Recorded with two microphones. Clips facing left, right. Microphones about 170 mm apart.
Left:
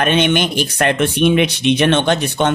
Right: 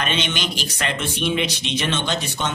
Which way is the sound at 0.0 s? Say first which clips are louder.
Left 10 dB; 55° left (ahead or behind).